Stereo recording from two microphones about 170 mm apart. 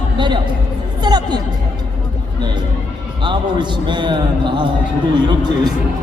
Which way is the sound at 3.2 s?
25° right (ahead or behind).